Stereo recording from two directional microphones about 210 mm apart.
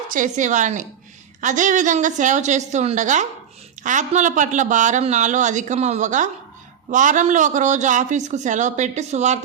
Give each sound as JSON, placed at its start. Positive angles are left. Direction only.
{"t": 0.1, "sound": "speech", "side_deg": -35}